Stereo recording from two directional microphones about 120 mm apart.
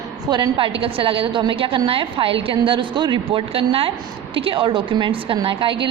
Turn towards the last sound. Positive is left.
turn(degrees=-45)  # may be behind; listen again after turning